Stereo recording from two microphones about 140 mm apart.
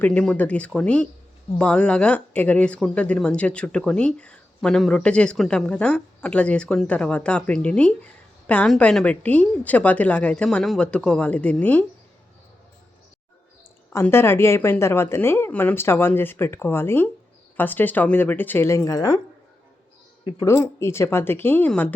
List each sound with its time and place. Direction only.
0.0 s speech: 10° left (ahead or behind)
13.9 s speech: 15° left (ahead or behind)
20.4 s speech: 20° left (ahead or behind)